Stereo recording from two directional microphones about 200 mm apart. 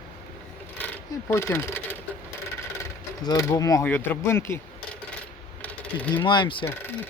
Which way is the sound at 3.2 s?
15° left (ahead or behind).